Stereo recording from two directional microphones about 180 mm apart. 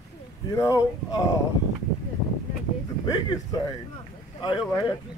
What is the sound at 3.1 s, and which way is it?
Speech, 20° left (ahead or behind).